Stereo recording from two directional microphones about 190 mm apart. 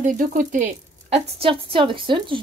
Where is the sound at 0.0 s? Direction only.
45° right (ahead or behind).